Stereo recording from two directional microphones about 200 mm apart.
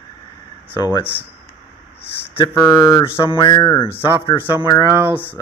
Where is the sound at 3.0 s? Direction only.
25° left (ahead or behind).